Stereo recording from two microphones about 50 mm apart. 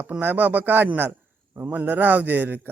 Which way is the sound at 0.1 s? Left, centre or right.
Right.